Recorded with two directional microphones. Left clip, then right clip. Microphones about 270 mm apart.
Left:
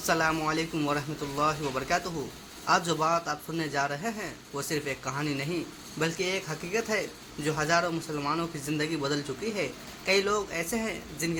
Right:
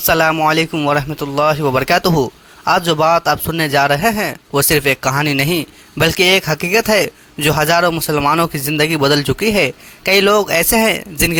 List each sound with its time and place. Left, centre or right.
0.0 s a man's voice: right